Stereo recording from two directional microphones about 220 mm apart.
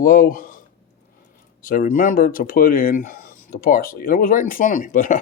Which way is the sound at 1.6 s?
40° left (ahead or behind).